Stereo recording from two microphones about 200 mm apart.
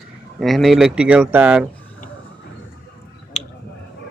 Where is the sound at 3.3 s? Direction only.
35° left (ahead or behind).